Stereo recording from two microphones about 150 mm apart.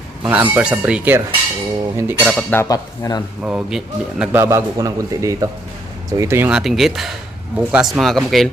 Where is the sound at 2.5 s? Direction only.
20° left (ahead or behind).